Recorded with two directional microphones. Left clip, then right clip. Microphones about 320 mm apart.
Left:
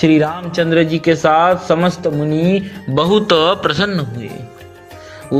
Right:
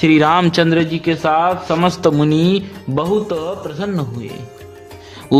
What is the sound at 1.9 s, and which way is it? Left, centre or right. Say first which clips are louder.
Speech: right 3 dB; centre.